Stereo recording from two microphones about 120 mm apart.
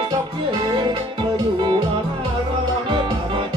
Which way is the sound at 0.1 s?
40° right (ahead or behind).